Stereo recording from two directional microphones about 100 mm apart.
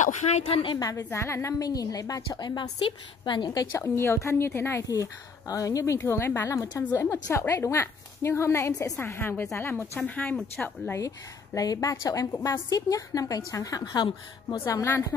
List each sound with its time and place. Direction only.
0.2 s a woman's voice: 85° left
0.7 s a woman's voice: 35° left (ahead or behind)
3.7 s a woman's voice: 25° left (ahead or behind)
11.0 s a woman's voice: 35° left (ahead or behind)